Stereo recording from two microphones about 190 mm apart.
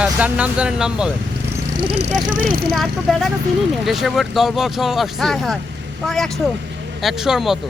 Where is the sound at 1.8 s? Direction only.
30° right (ahead or behind).